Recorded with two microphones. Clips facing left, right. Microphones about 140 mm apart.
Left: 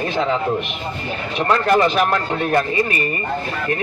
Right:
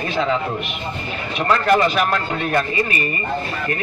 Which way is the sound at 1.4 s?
30° left (ahead or behind).